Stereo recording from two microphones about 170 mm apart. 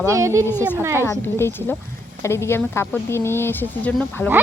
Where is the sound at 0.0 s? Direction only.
15° right (ahead or behind).